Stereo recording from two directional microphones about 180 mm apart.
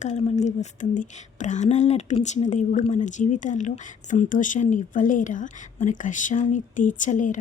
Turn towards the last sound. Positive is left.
turn(degrees=45)  # may be behind; listen again after turning